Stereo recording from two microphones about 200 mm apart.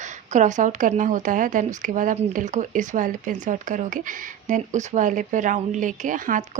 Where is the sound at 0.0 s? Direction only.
35° right (ahead or behind).